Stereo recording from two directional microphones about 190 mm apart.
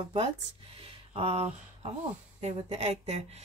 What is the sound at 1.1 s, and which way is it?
Speech, 30° right (ahead or behind).